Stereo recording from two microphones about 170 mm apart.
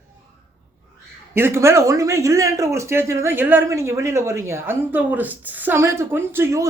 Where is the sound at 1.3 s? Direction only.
15° right (ahead or behind).